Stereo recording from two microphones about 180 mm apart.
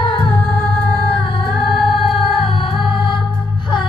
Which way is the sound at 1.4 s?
30° left (ahead or behind).